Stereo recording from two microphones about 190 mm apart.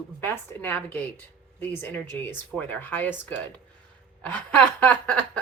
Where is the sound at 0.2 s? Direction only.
10° left (ahead or behind).